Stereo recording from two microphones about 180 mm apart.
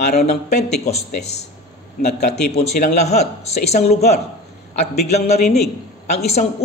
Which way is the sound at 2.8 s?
40° left (ahead or behind).